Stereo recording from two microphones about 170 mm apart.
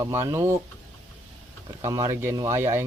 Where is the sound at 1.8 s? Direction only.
20° right (ahead or behind).